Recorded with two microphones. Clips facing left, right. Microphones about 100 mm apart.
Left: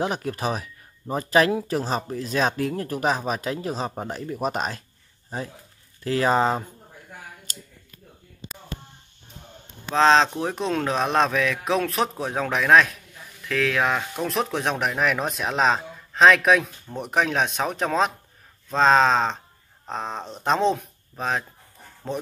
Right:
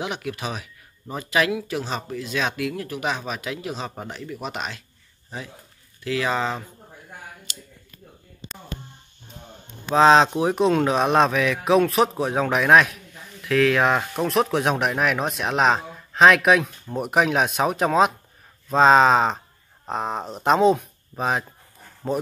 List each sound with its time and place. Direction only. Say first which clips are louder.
0.0 s speech: left 3 dB; 40° left (ahead or behind)
7.5 s a sound: even; 40° left (ahead or behind)
9.8 s speech: right 3 dB; 5° right (ahead or behind)